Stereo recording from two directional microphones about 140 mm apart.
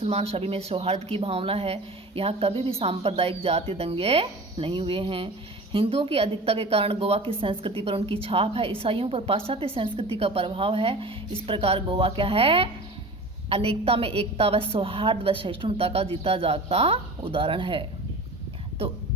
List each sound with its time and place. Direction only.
0.0 s speech: 45° right (ahead or behind)